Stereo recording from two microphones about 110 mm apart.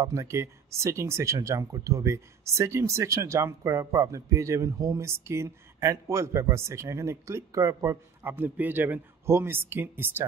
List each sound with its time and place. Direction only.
0.0 s speech: 30° right (ahead or behind)